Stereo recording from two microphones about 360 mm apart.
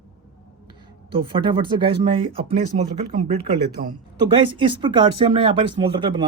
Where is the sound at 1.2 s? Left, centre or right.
Centre.